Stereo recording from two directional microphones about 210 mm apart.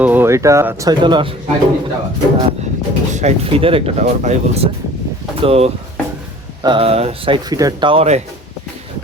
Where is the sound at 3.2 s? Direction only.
30° right (ahead or behind).